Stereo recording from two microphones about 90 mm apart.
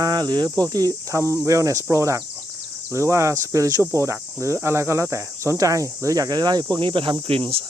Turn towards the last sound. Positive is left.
turn(degrees=-90)